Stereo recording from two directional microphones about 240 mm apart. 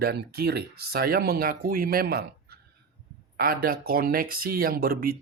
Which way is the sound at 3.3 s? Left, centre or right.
Right.